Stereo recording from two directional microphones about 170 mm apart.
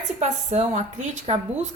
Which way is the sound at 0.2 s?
45° right (ahead or behind).